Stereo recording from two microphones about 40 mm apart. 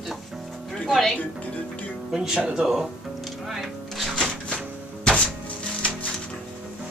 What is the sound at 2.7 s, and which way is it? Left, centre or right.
Music, centre.